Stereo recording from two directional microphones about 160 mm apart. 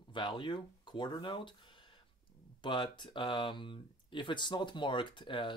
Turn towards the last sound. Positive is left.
turn(degrees=30)  # may be behind; listen again after turning